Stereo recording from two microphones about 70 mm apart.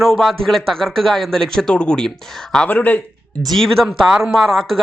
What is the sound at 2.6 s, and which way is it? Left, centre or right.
Speech, left.